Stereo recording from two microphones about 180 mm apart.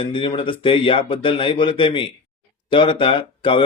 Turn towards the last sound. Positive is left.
turn(degrees=30)  # may be behind; listen again after turning